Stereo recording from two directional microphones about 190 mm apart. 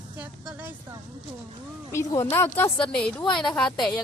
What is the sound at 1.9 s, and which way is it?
A woman's voice, 15° left (ahead or behind).